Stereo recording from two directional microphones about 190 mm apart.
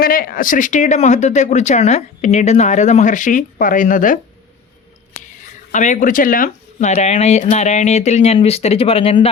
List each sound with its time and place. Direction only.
0.0 s speech: 50° left (ahead or behind)
5.7 s speech: 40° left (ahead or behind)